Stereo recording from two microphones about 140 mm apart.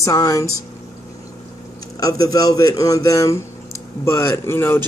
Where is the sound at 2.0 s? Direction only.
25° left (ahead or behind).